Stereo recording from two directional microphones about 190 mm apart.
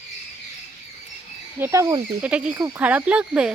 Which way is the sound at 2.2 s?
5° right (ahead or behind).